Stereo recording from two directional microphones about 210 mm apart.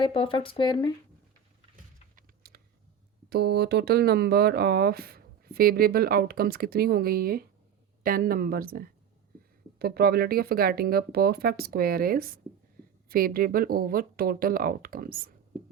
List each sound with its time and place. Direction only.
0.0 s speech: 25° left (ahead or behind)
2.1 s typing: 45° right (ahead or behind)
3.2 s speech: 50° right (ahead or behind)